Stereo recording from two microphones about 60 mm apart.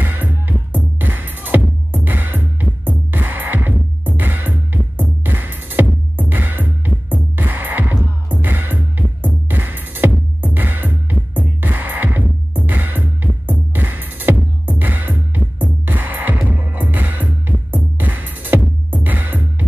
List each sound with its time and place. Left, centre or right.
0.0 s music: right